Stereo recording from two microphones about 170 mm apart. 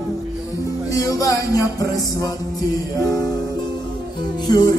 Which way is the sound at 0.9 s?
20° left (ahead or behind).